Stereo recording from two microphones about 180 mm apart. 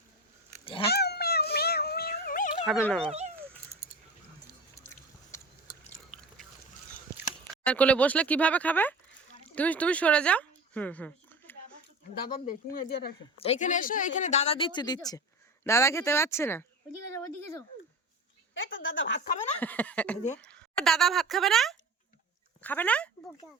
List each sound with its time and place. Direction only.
0.6 s dog: 30° left (ahead or behind)
0.9 s dog: 65° left (ahead or behind)
2.8 s speech: 5° left (ahead or behind)
3.1 s speech: 35° right (ahead or behind)
4.8 s a sound: 15° left (ahead or behind)
6.1 s a sound: 5° left (ahead or behind)
7.5 s speech: 5° left (ahead or behind)
12.5 s speech: 55° left (ahead or behind)
13.4 s speech: 40° left (ahead or behind); by 16.6 s 15° left (ahead or behind)
18.5 s a woman's voice: 90° left
19.5 s speech: 10° left (ahead or behind)